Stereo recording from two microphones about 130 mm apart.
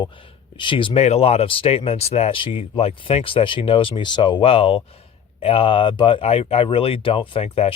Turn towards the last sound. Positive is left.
turn(degrees=50)  # may be behind; listen again after turning